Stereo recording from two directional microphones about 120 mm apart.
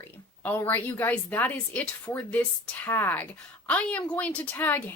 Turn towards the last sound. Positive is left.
turn(degrees=15)  # may be behind; listen again after turning